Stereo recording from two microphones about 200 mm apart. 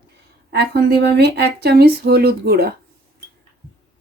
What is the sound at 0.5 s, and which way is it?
A woman's voice, 55° right (ahead or behind).